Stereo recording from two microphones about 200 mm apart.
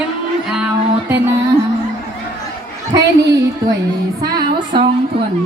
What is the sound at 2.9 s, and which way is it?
Speech, 55° right (ahead or behind).